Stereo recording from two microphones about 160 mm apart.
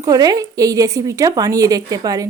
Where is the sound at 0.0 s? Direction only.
25° right (ahead or behind).